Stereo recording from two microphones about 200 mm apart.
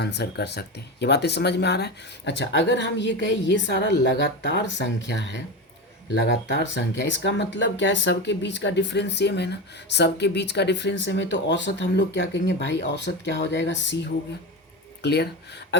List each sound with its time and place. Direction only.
0.0 s speech: 55° left (ahead or behind)